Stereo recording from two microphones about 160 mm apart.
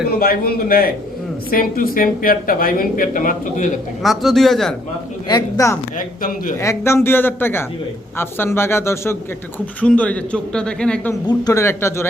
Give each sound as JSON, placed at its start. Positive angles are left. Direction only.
{"t": 0.0, "sound": "a man's voice", "side_deg": 70}
{"t": 4.0, "sound": "a man's voice", "side_deg": 0}
{"t": 5.3, "sound": "speech", "side_deg": 20}
{"t": 6.0, "sound": "a woman's voice", "side_deg": 60}
{"t": 6.6, "sound": "a man's voice", "side_deg": 15}
{"t": 11.3, "sound": "a man's voice", "side_deg": 20}